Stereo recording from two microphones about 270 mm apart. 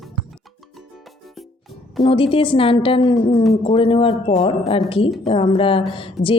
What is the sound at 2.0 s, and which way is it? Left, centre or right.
A woman's voice, centre.